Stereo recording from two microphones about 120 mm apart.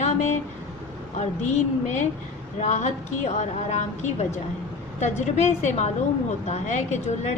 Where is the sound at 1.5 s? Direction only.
80° left.